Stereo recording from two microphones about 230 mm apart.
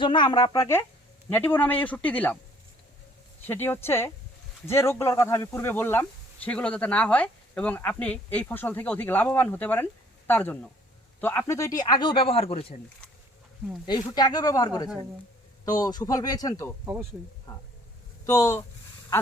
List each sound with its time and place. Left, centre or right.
0.0 s speech: centre
3.4 s speech: centre; by 12.7 s left
13.8 s speech: centre
15.8 s speech: centre
16.8 s speech: centre
17.5 s speech: centre